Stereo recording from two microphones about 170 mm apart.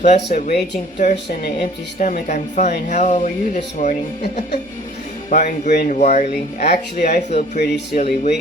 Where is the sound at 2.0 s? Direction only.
45° left (ahead or behind).